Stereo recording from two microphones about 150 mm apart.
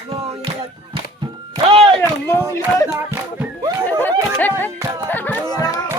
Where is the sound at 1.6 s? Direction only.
35° right (ahead or behind).